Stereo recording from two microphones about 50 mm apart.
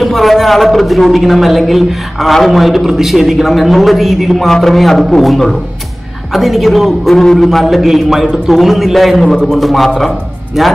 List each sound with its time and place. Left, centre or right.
0.0 s a man's voice: centre